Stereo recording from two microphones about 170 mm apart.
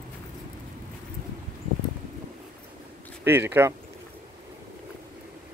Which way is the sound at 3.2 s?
15° right (ahead or behind).